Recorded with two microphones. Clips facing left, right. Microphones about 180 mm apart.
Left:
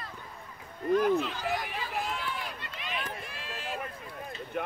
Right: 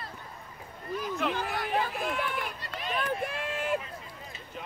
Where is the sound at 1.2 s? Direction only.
60° right (ahead or behind).